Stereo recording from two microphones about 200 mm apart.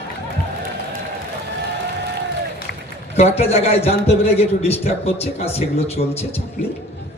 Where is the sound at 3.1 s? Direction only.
30° left (ahead or behind).